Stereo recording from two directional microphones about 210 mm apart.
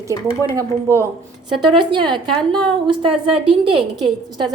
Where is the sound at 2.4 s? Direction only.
5° left (ahead or behind).